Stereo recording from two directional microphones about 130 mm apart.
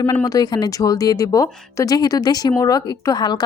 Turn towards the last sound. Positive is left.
turn(degrees=30)  # may be behind; listen again after turning